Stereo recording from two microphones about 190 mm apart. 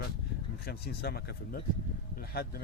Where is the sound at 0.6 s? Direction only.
55° left (ahead or behind).